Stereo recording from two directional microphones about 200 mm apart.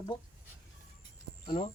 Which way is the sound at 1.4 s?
30° left (ahead or behind).